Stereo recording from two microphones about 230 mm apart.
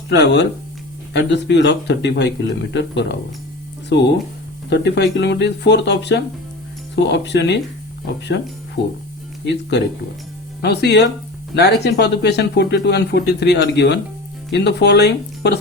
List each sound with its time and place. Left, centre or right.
0.1 s speech: left